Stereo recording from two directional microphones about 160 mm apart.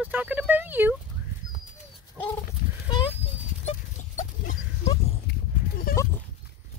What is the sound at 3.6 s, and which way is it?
Dog, 50° left (ahead or behind).